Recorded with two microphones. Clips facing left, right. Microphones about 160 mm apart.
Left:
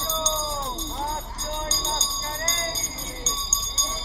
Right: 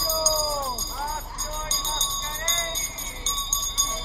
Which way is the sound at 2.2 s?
40° left (ahead or behind).